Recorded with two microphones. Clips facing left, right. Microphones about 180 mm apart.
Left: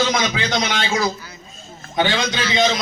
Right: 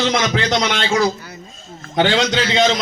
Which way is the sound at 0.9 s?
65° right (ahead or behind).